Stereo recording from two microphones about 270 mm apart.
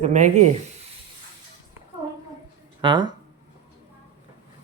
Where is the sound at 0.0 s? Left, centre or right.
Right.